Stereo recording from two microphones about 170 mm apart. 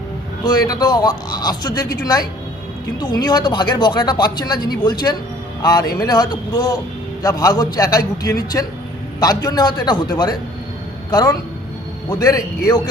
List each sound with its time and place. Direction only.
0.4 s speech: 25° left (ahead or behind)